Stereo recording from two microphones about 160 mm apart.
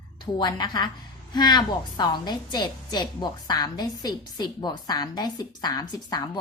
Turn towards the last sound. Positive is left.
turn(degrees=25)  # may be behind; listen again after turning